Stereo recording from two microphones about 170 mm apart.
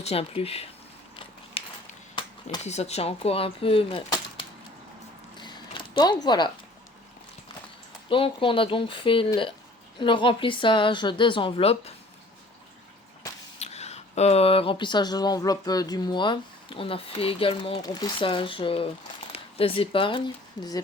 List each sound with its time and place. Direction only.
0.0 s speech: 35° left (ahead or behind)
1.6 s a sound: 35° left (ahead or behind)
2.6 s speech: 40° left (ahead or behind)
5.4 s a sound: 25° left (ahead or behind)
8.1 s a woman's voice: 30° left (ahead or behind)
13.6 s speech: 40° left (ahead or behind); by 20.8 s 25° left (ahead or behind)